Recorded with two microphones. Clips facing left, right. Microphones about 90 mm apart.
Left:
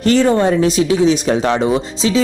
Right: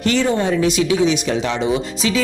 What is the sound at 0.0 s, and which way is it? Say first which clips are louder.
Speech: left 5 dB; 40° left (ahead or behind).